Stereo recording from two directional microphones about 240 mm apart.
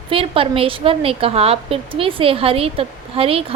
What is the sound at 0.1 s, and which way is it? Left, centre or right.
A woman's voice, right.